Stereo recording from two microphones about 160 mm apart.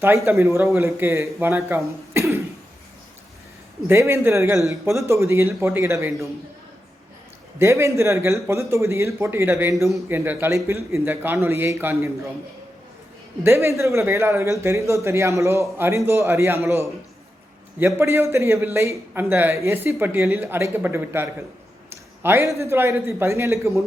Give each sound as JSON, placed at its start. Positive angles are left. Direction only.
{"t": 0.5, "sound": "a man's voice", "side_deg": -15}
{"t": 2.1, "sound": "cough", "side_deg": -15}
{"t": 3.8, "sound": "a man's voice", "side_deg": -15}
{"t": 7.6, "sound": "a man's voice", "side_deg": -20}
{"t": 13.4, "sound": "a man's voice", "side_deg": -15}